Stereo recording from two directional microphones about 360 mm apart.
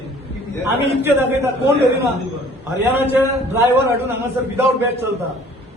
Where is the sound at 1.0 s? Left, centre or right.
Centre.